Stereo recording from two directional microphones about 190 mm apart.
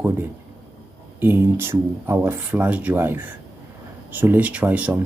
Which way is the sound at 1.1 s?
10° right (ahead or behind).